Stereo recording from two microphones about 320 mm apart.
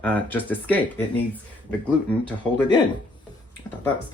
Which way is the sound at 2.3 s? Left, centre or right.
Centre.